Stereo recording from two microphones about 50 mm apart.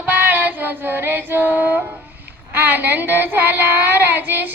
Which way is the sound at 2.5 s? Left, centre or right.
Right.